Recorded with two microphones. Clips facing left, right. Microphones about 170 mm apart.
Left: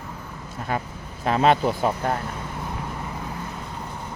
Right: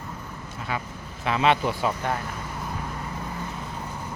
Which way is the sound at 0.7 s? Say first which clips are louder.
Left 4 dB; 45° left (ahead or behind).